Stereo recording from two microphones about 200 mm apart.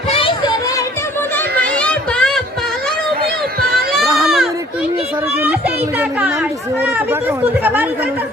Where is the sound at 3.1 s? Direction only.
50° right (ahead or behind).